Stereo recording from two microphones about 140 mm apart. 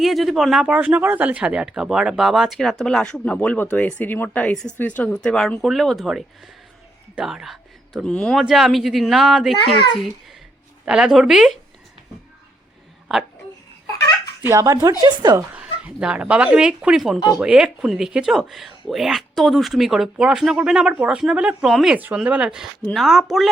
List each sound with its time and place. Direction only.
0.0 s speech: centre (ahead or behind)
10.8 s speech: 5° right (ahead or behind)
13.1 s speech: centre (ahead or behind)
14.4 s a woman's voice: 20° right (ahead or behind)
15.5 s speech: 10° right (ahead or behind)